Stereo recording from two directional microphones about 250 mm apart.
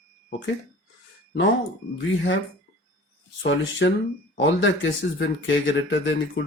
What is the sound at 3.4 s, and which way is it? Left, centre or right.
Speech, left.